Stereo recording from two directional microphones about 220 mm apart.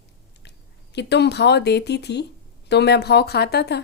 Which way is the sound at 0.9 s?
50° left (ahead or behind).